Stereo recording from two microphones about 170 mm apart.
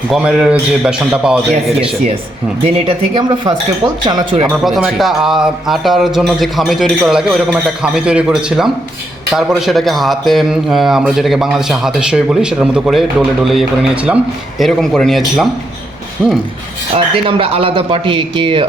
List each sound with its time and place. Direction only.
0.1 s a man's voice: 5° right (ahead or behind)
2.6 s speech: 30° right (ahead or behind)
4.6 s a man's voice: centre (ahead or behind)
16.9 s speech: 30° right (ahead or behind)